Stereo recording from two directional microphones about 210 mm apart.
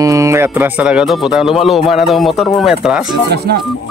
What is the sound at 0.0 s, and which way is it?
Speech, 15° right (ahead or behind).